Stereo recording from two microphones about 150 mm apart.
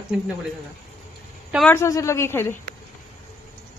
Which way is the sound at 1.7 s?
20° left (ahead or behind).